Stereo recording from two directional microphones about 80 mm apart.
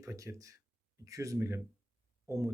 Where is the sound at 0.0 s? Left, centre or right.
Right.